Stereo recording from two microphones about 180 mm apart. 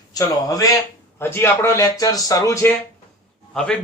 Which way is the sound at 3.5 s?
5° left (ahead or behind).